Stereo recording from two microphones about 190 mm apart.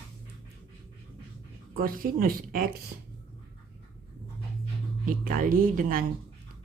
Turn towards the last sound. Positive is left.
turn(degrees=-45)  # may be behind; listen again after turning